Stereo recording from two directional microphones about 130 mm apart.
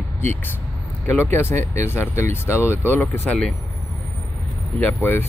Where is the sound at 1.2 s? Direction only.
15° left (ahead or behind).